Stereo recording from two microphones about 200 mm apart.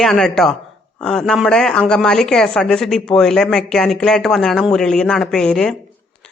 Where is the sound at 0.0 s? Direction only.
Centre (ahead or behind).